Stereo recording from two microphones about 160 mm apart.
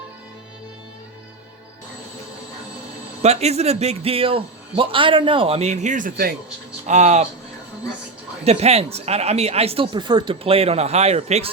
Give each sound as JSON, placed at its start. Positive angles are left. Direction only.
{"t": 3.2, "sound": "a man's voice", "side_deg": -40}
{"t": 6.8, "sound": "speech", "side_deg": -45}
{"t": 8.4, "sound": "a man's voice", "side_deg": -40}